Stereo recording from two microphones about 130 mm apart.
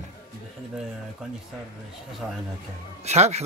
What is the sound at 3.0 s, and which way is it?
Speech, 60° right (ahead or behind).